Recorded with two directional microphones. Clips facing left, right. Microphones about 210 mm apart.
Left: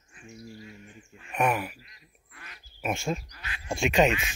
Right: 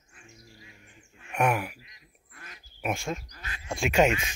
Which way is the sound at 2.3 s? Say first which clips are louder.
Right 1 dB; 45° right (ahead or behind).